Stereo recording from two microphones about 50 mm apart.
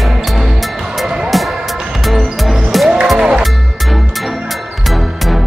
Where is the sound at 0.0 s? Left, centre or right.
Centre.